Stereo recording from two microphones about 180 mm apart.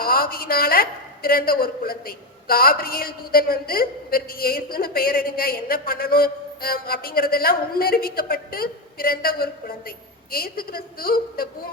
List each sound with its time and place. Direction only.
0.0 s a woman's voice: 55° left (ahead or behind)